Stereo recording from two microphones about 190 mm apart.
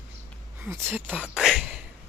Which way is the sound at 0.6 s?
10° right (ahead or behind).